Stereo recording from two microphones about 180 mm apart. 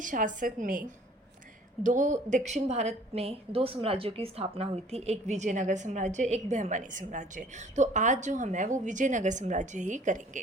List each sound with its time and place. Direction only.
0.0 s a woman's voice: 45° right (ahead or behind)